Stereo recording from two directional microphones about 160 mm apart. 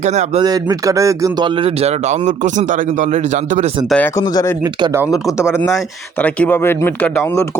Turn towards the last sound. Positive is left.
turn(degrees=20)  # may be behind; listen again after turning